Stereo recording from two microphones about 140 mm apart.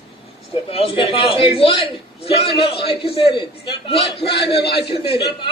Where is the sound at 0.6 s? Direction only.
45° left (ahead or behind).